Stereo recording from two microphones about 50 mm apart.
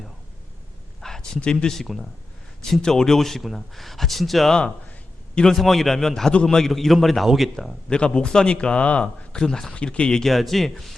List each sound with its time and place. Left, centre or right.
1.0 s a sound: centre
1.4 s speech: centre
7.9 s speech: centre
9.7 s speech: left
10.2 s speech: centre